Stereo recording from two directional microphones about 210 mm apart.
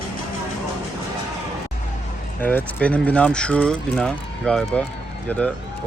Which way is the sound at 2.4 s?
10° left (ahead or behind).